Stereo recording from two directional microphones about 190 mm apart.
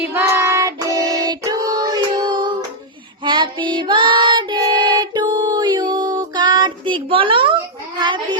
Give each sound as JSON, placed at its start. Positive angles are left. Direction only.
{"t": 0.0, "sound": "child singing", "side_deg": -10}
{"t": 6.1, "sound": "a sound", "side_deg": -25}
{"t": 7.9, "sound": "child singing", "side_deg": -25}